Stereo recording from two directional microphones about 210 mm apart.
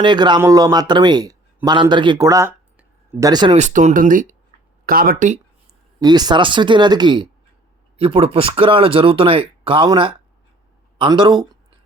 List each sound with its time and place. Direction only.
0.0 s speech: 20° right (ahead or behind); by 5.4 s 40° right (ahead or behind)
6.0 s speech: 20° right (ahead or behind)